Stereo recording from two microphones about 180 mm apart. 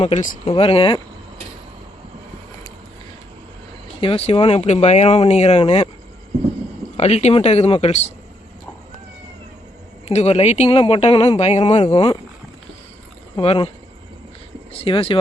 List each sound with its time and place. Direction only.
0.0 s speech: 40° left (ahead or behind)
0.4 s speech: 30° left (ahead or behind)
4.0 s speech: 30° left (ahead or behind)
6.9 s speech: 35° left (ahead or behind)
10.1 s speech: 35° left (ahead or behind)
13.3 s speech: 30° left (ahead or behind)
14.7 s speech: 30° left (ahead or behind)